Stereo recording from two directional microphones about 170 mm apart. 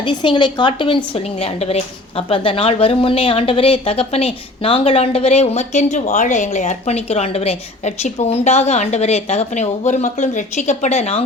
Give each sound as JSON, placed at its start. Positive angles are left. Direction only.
{"t": 0.0, "sound": "a woman's voice", "side_deg": 30}